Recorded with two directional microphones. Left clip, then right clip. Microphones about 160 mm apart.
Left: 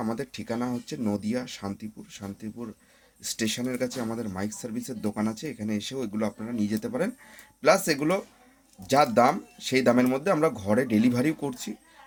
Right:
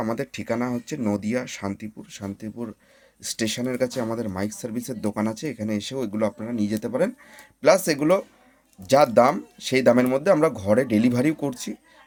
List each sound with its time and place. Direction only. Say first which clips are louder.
0.0 s speech: right 5 dB; 30° right (ahead or behind)